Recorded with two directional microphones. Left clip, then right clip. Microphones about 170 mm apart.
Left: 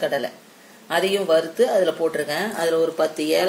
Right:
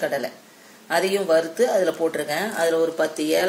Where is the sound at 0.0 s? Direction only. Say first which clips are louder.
Left 2 dB; 20° left (ahead or behind).